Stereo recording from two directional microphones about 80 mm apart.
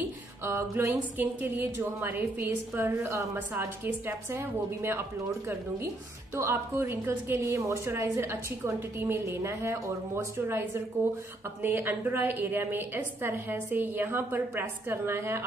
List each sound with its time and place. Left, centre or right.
0.0 s music: right
1.1 s a woman's voice: right
6.3 s a woman's voice: right